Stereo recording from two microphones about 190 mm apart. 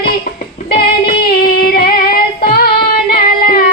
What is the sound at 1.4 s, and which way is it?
Female singing, 55° left (ahead or behind).